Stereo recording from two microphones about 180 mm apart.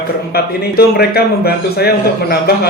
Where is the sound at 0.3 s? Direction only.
60° left (ahead or behind).